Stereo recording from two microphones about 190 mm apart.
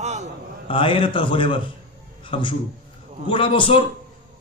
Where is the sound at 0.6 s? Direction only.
30° left (ahead or behind).